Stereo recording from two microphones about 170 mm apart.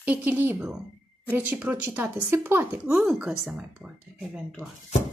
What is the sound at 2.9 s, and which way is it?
A woman's voice, centre (ahead or behind).